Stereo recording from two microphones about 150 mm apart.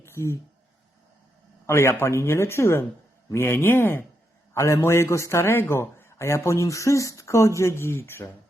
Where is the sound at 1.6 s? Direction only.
15° left (ahead or behind).